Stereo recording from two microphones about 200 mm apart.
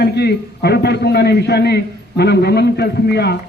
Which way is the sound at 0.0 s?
55° left (ahead or behind).